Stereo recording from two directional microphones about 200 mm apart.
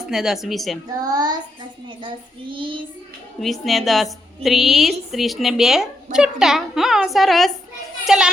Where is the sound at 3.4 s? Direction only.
Centre (ahead or behind).